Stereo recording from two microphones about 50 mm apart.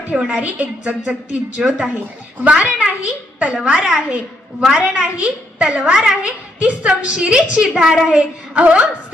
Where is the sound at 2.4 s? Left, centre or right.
Right.